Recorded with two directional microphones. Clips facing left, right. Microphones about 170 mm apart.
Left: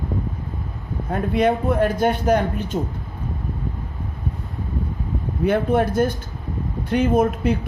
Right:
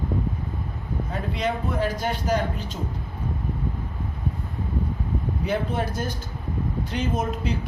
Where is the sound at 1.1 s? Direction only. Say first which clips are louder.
Left 9 dB; 55° left (ahead or behind).